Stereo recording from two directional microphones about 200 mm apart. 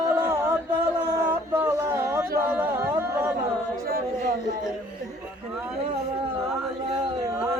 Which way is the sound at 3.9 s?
50° right (ahead or behind).